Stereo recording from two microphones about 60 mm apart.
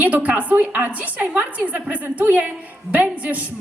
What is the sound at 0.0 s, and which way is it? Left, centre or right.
A woman's voice, right.